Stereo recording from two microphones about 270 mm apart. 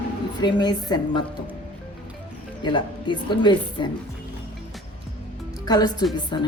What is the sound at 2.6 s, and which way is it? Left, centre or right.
Speech, centre.